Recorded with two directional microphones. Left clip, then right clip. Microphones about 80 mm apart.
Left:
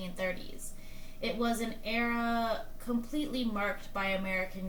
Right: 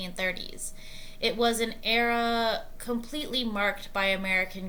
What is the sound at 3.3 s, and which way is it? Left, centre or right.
Speech, right.